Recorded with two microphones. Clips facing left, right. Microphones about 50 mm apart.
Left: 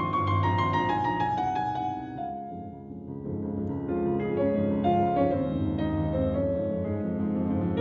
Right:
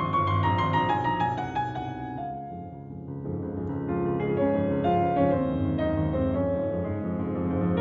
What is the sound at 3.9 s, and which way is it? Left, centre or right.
Music, right.